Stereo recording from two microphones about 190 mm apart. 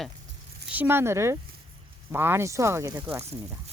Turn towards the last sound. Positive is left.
turn(degrees=-15)  # may be behind; listen again after turning